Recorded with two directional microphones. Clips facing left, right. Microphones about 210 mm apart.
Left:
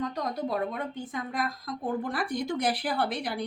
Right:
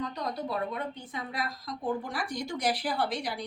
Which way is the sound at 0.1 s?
50° left (ahead or behind).